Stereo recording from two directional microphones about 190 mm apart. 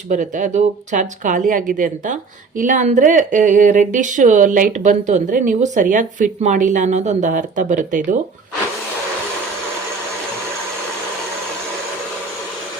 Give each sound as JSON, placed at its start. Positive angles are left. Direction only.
{"t": 0.1, "sound": "speech", "side_deg": -40}